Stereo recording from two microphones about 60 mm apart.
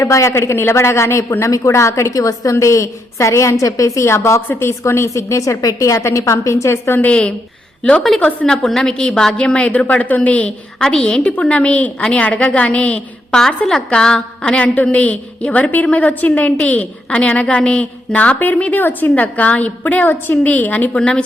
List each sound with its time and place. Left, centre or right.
0.0 s speech: left
1.5 s a woman's voice: left
7.0 s a woman's voice: centre
8.5 s a woman's voice: centre